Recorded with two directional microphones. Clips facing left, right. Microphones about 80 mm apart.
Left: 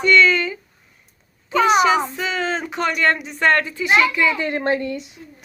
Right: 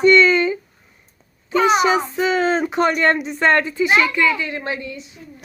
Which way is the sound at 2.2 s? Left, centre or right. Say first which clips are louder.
Right 6 dB; right.